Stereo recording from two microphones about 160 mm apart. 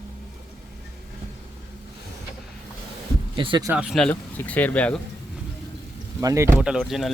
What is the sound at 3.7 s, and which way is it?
Speech, centre (ahead or behind).